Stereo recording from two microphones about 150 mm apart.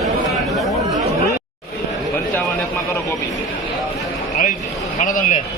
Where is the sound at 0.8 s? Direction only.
25° right (ahead or behind).